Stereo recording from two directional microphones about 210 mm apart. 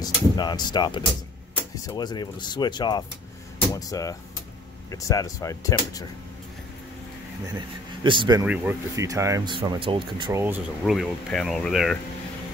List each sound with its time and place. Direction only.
0.0 s speech: 20° left (ahead or behind)
7.5 s speech: 20° right (ahead or behind)
10.4 s speech: 5° right (ahead or behind)